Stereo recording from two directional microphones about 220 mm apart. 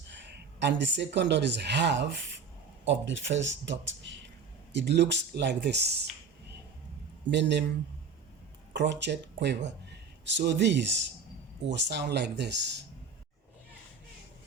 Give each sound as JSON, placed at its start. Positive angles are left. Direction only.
{"t": 0.1, "sound": "speech", "side_deg": -55}
{"t": 7.3, "sound": "speech", "side_deg": -50}
{"t": 8.7, "sound": "speech", "side_deg": -50}